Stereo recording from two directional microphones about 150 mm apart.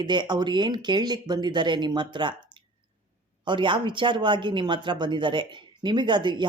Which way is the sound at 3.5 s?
30° right (ahead or behind).